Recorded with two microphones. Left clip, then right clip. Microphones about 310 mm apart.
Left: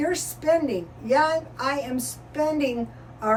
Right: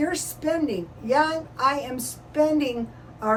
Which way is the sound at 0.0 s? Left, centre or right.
Centre.